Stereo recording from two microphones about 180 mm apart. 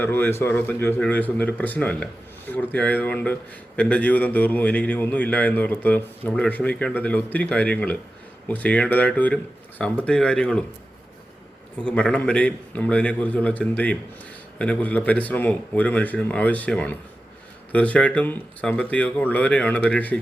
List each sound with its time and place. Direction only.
0.0 s a man's voice: 10° left (ahead or behind)
11.8 s a man's voice: 5° left (ahead or behind)